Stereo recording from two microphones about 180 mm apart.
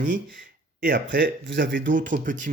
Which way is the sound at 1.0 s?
85° right.